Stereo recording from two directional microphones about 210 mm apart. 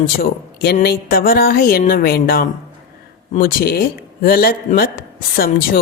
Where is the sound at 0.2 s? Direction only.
50° left (ahead or behind).